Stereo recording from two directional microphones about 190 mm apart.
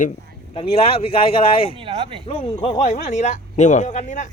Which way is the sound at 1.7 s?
30° right (ahead or behind).